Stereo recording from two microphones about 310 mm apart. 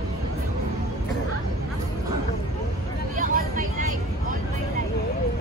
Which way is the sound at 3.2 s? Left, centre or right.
Right.